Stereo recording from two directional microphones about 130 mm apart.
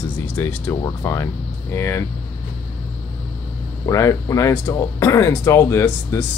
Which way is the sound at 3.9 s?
25° left (ahead or behind).